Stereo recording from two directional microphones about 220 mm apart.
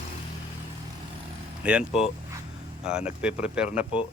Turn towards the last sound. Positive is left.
turn(degrees=-5)  # may be behind; listen again after turning